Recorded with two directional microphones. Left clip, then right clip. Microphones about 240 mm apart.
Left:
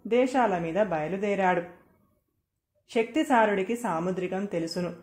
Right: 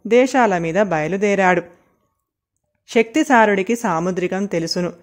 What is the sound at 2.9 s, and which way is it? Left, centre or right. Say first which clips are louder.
Speech: right 10 dB; right.